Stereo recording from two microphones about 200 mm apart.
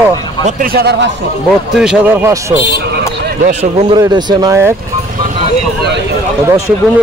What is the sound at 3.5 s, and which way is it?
Speech, 30° right (ahead or behind).